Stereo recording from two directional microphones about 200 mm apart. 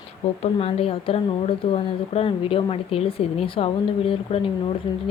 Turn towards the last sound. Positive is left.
turn(degrees=25)  # may be behind; listen again after turning